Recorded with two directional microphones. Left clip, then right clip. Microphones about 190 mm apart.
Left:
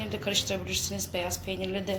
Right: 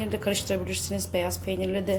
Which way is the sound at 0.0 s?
35° right (ahead or behind).